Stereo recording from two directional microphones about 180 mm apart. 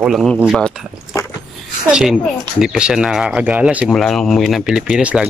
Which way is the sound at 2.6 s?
5° right (ahead or behind).